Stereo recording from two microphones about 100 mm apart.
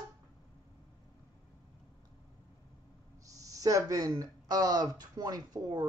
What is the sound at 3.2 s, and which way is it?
Speech, 35° right (ahead or behind).